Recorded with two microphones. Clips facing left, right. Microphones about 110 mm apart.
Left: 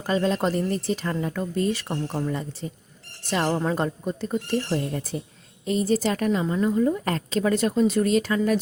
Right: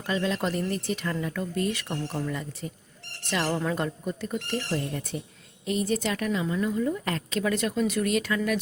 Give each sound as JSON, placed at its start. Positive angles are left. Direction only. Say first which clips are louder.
{"t": 0.1, "sound": "a woman's voice", "louder": "left 4 dB", "side_deg": 40}